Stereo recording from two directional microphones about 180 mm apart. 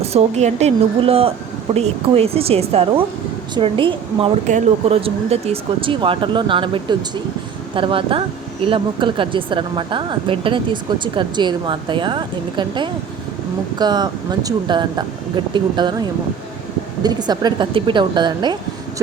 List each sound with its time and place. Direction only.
0.0 s a woman's voice: 35° right (ahead or behind)